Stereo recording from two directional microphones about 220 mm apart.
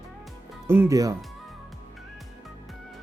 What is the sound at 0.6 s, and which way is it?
Speech, 10° right (ahead or behind).